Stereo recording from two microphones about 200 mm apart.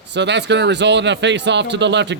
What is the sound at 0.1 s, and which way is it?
Speech, 60° right (ahead or behind).